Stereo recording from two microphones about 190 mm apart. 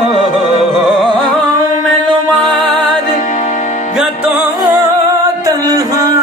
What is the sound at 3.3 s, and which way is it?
Music, 40° left (ahead or behind).